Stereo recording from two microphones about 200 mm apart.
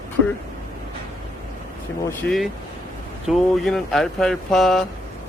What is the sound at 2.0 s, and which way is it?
Speech, 5° left (ahead or behind).